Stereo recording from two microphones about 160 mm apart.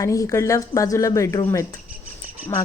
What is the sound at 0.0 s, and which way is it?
A woman's voice, 20° left (ahead or behind).